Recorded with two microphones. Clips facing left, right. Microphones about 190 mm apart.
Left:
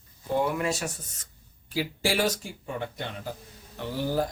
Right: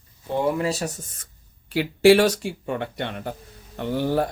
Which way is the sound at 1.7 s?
70° right (ahead or behind).